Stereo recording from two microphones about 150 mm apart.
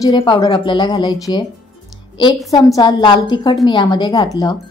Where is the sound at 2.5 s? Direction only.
25° left (ahead or behind).